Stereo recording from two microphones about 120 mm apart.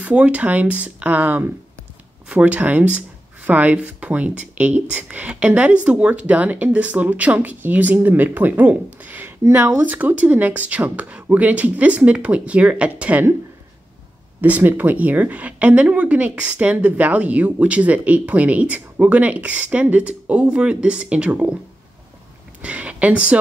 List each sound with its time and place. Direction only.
0.0 s speech: 10° right (ahead or behind)
14.4 s speech: 15° right (ahead or behind)
22.6 s speech: 10° right (ahead or behind)